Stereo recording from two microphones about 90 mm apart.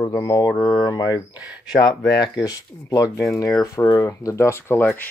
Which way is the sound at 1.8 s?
50° left (ahead or behind).